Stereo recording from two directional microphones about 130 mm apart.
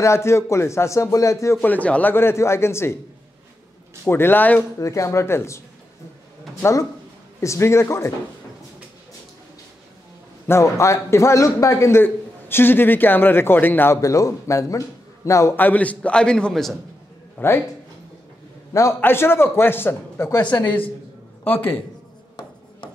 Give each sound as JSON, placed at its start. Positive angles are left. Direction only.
{"t": 0.0, "sound": "a man's voice", "side_deg": 20}
{"t": 4.0, "sound": "a man's voice", "side_deg": 15}
{"t": 6.6, "sound": "a man's voice", "side_deg": 25}
{"t": 10.4, "sound": "a man's voice", "side_deg": 20}
{"t": 17.4, "sound": "a man's voice", "side_deg": 15}
{"t": 18.7, "sound": "a man's voice", "side_deg": 25}